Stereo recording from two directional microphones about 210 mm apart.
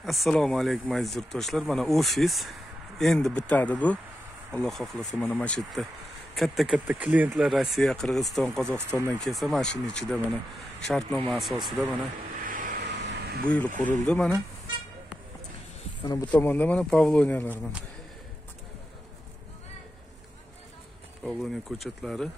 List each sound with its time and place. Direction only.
0.0 s speech: centre (ahead or behind)
12.4 s vehicle: 40° right (ahead or behind)
13.0 s vehicle: 50° right (ahead or behind)
13.5 s speech: 5° left (ahead or behind)
16.0 s speech: 20° left (ahead or behind)
16.3 s a man's voice: 10° left (ahead or behind)
21.2 s speech: centre (ahead or behind)